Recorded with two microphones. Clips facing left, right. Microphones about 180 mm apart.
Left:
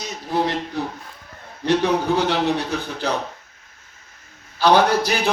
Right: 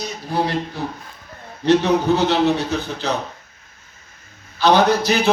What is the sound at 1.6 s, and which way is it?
A man's voice, 10° left (ahead or behind).